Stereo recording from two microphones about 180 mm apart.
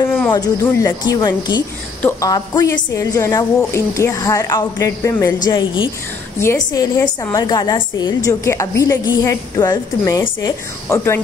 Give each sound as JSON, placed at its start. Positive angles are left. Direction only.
{"t": 0.0, "sound": "a woman's voice", "side_deg": 15}